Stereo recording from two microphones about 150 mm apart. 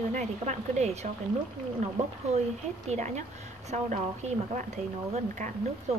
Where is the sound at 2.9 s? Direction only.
50° right (ahead or behind).